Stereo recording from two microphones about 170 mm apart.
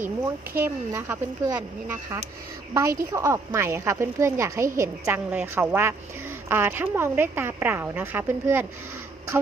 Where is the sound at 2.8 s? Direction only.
20° right (ahead or behind).